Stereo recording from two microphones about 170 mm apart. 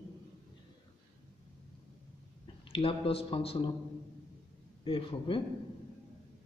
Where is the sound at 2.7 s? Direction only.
35° left (ahead or behind).